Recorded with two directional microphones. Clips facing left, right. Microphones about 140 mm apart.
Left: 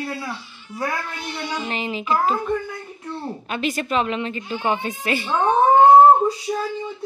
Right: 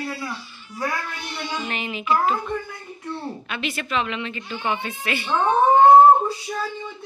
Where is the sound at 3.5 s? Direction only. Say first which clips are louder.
Left 6 dB; 40° left (ahead or behind).